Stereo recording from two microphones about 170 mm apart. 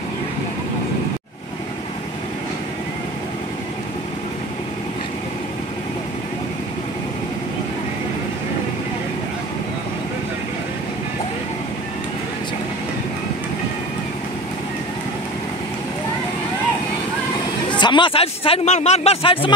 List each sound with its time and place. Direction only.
17.6 s a man's voice: 25° left (ahead or behind)